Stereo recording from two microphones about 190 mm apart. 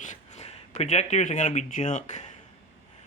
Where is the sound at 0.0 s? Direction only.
40° left (ahead or behind).